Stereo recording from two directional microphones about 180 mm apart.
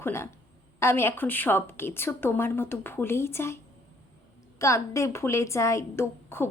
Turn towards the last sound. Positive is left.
turn(degrees=15)  # may be behind; listen again after turning